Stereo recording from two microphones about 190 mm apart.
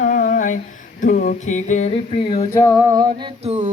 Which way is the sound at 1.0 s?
45° left (ahead or behind).